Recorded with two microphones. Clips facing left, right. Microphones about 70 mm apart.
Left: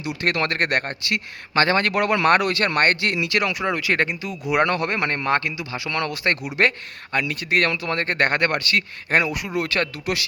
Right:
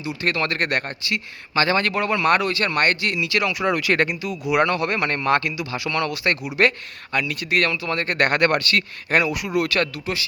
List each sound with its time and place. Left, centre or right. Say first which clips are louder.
0.0 s speech: left 1 dB; left
2.0 s speech: left 2 dB; left
2.2 s speech: even; left
3.6 s speech: right 2 dB; left